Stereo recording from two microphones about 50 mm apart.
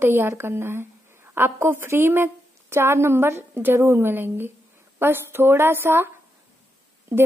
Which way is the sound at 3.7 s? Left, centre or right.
Right.